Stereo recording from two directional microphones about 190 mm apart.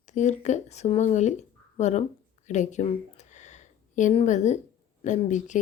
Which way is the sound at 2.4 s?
40° left (ahead or behind).